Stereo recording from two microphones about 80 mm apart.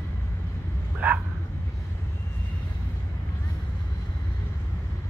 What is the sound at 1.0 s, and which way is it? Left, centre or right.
Speech, centre.